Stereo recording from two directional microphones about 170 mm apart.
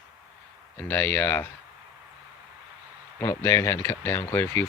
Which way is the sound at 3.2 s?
15° left (ahead or behind).